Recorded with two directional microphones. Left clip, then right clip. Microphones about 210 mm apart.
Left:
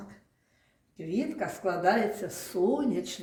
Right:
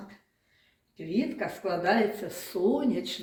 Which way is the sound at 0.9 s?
60° left (ahead or behind).